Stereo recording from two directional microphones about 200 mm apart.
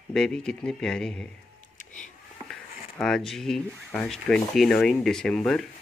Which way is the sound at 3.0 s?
Centre (ahead or behind).